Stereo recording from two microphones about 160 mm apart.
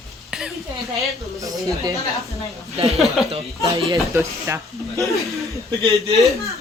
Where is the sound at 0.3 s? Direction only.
5° right (ahead or behind).